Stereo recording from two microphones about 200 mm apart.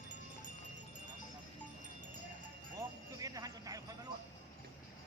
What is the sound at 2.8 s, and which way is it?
Jingle bell, 15° right (ahead or behind).